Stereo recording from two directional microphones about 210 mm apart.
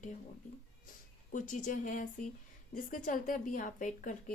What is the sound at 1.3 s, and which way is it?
A woman's voice, 40° left (ahead or behind).